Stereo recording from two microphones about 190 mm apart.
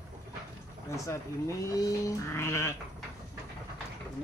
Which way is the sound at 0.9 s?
15° left (ahead or behind).